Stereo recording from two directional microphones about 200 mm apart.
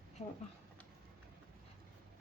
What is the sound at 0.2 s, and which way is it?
Speech, 30° left (ahead or behind).